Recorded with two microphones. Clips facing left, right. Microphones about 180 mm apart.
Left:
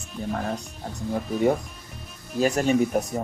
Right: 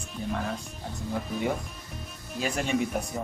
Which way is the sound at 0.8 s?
50° left (ahead or behind).